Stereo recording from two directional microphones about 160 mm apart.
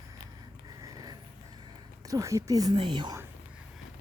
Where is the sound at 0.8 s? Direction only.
25° right (ahead or behind).